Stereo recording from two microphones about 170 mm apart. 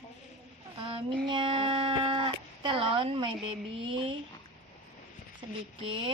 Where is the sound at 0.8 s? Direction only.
30° right (ahead or behind).